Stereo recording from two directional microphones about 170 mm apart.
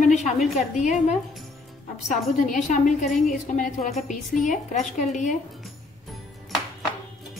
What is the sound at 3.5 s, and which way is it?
A woman's voice, 45° left (ahead or behind).